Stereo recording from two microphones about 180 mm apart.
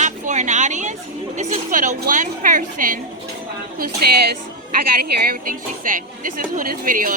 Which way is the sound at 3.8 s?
60° right (ahead or behind).